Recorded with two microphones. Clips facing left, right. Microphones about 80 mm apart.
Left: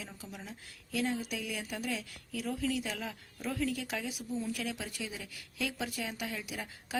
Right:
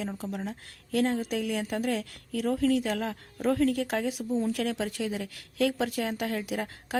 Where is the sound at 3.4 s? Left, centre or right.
Right.